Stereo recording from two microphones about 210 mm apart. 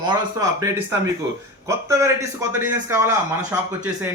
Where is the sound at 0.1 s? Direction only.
15° right (ahead or behind).